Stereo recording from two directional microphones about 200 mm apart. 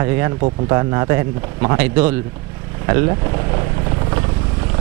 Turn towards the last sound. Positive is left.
turn(degrees=-15)  # may be behind; listen again after turning